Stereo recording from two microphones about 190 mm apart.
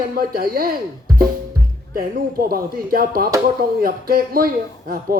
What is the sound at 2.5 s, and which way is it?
Speech, 50° right (ahead or behind).